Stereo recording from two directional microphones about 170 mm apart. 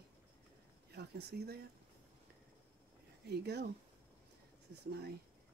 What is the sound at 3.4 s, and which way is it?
Speech, 80° right.